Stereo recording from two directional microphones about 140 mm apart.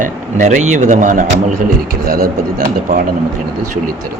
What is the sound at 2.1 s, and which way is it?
Speech, 90° right.